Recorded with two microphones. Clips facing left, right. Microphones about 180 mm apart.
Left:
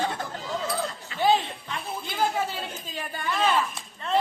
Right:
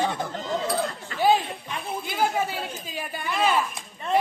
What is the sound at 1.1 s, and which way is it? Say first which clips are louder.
Jingle bell: right 2 dB; 50° right (ahead or behind).